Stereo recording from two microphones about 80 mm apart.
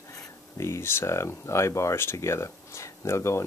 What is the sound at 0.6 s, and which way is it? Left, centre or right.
Speech, left.